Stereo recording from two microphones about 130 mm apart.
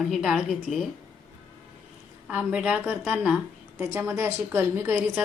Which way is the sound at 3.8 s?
20° right (ahead or behind).